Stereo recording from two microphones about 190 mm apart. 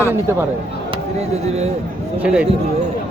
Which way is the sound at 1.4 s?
35° right (ahead or behind).